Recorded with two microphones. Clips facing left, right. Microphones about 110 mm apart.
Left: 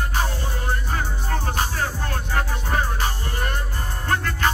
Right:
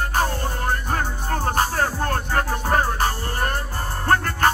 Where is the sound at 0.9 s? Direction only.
45° right (ahead or behind).